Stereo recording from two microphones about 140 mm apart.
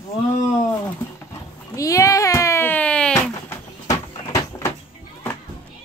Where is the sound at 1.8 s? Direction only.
25° left (ahead or behind); by 3.5 s 5° left (ahead or behind).